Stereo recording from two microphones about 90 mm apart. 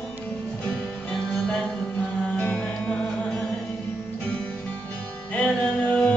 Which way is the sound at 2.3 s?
10° left (ahead or behind).